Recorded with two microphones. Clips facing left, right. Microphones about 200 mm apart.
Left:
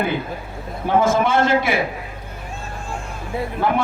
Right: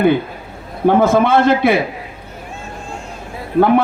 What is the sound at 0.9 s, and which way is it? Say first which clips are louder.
Speech: right 5 dB; 60° right (ahead or behind).